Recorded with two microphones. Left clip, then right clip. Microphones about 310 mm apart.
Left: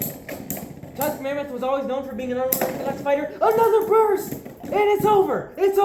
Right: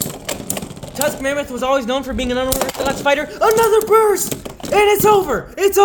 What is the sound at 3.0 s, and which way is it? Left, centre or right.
Speech, right.